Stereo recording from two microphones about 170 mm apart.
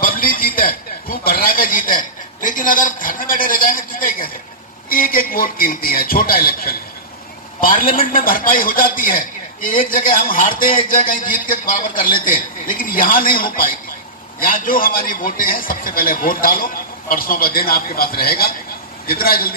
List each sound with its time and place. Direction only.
0.0 s a man's voice: 60° left (ahead or behind)